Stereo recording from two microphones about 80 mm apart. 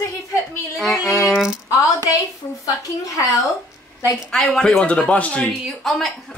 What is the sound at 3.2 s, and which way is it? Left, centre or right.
Speech, left.